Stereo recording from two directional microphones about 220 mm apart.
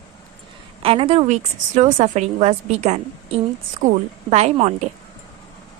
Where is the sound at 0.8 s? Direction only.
25° right (ahead or behind).